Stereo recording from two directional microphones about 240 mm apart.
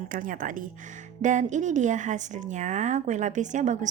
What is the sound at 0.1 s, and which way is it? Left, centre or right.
A woman's voice, right.